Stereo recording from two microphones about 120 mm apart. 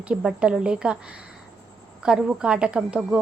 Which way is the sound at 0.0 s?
10° right (ahead or behind).